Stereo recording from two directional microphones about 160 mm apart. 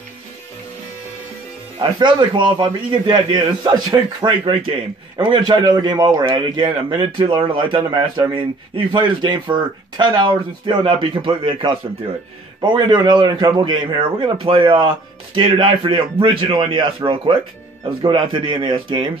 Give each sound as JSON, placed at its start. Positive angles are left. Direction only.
{"t": 1.8, "sound": "a man's voice", "side_deg": -30}